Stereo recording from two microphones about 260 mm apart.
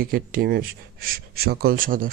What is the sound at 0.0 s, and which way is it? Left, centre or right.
Speech, right.